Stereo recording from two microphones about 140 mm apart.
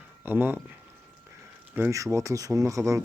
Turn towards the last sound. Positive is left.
turn(degrees=-20)  # may be behind; listen again after turning